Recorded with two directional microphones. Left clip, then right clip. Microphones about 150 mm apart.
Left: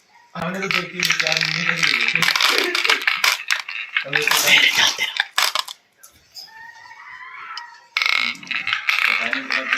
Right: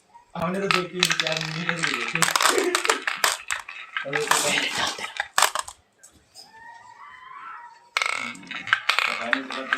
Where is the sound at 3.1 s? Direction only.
20° right (ahead or behind).